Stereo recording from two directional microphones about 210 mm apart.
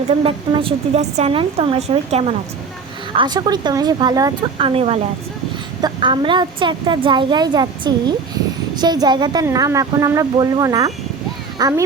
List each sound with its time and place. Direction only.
0.1 s a woman's voice: 25° right (ahead or behind)